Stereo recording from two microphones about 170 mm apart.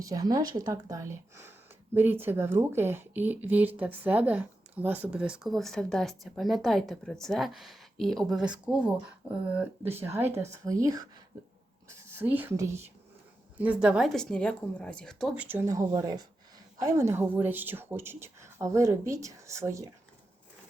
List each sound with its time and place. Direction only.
0.0 s a woman's voice: 20° right (ahead or behind)
11.3 s a sound: 20° right (ahead or behind)
11.9 s a woman's voice: 15° right (ahead or behind); by 15.4 s centre (ahead or behind)
15.4 s a woman's voice: 15° right (ahead or behind)